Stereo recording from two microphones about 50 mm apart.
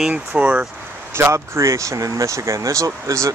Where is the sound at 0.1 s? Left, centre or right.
Right.